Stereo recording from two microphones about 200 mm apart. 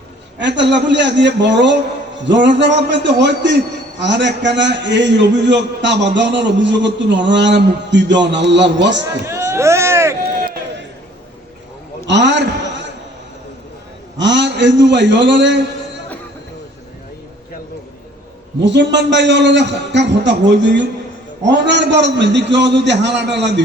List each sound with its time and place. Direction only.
0.3 s a man's voice: 60° right (ahead or behind)
9.2 s vehicle: 15° right (ahead or behind)
12.0 s a sound: 60° right (ahead or behind)
14.2 s a man's voice: 60° right (ahead or behind)
18.6 s a man's voice: 60° right (ahead or behind)